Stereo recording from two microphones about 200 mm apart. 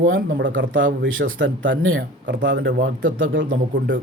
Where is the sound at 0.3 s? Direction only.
60° right (ahead or behind).